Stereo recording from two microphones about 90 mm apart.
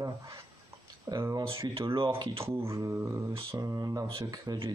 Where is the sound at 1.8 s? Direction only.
75° right (ahead or behind).